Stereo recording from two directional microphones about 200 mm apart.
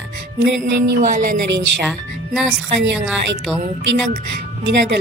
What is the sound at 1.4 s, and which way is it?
Speech, 60° right (ahead or behind).